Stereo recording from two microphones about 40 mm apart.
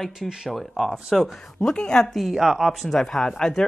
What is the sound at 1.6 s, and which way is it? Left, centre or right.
Speech, centre.